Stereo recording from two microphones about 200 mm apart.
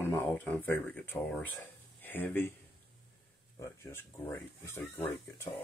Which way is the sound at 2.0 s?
10° left (ahead or behind).